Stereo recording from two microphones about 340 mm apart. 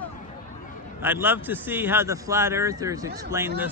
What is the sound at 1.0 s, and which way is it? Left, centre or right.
A man's voice, centre.